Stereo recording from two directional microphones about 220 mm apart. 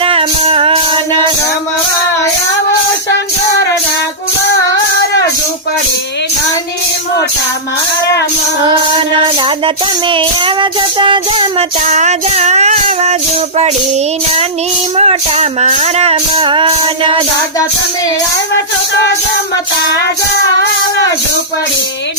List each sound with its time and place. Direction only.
0.0 s music: 25° right (ahead or behind)
10.1 s music: 20° right (ahead or behind)
11.9 s child singing: 30° right (ahead or behind)
14.9 s music: 30° right (ahead or behind)